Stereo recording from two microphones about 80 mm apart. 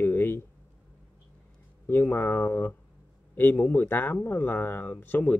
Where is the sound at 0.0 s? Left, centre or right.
Left.